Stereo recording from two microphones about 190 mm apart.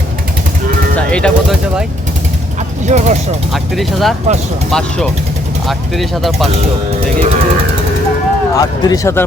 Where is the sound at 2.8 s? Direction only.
40° right (ahead or behind).